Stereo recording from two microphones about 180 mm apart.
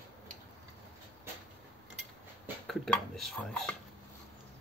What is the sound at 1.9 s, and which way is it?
Dishes, centre (ahead or behind).